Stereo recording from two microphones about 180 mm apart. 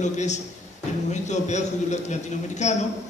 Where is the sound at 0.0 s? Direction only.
40° left (ahead or behind).